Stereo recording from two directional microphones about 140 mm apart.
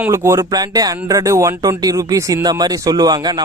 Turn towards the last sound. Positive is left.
turn(degrees=-30)  # may be behind; listen again after turning